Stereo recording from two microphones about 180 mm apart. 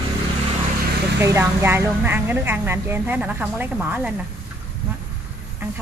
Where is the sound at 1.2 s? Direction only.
15° right (ahead or behind).